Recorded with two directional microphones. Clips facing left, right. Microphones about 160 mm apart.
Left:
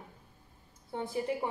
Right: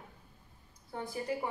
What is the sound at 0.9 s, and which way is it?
Speech, 25° left (ahead or behind).